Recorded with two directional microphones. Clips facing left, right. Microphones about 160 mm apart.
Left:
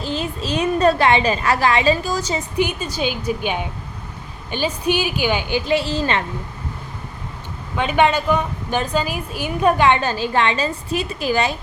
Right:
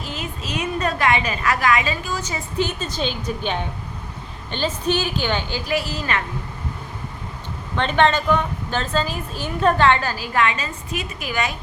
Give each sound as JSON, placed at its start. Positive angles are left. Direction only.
{"t": 0.0, "sound": "a woman's voice", "side_deg": 30}
{"t": 2.3, "sound": "a woman's voice", "side_deg": 15}
{"t": 7.8, "sound": "a woman's voice", "side_deg": 10}